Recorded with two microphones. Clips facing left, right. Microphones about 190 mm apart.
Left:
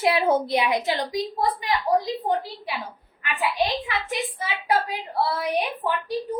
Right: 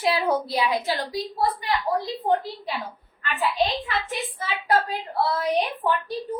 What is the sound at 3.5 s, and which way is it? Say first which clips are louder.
A woman's voice: even; 10° left (ahead or behind).